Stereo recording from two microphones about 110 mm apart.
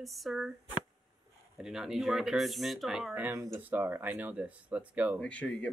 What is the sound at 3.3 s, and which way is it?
Speech, 25° right (ahead or behind).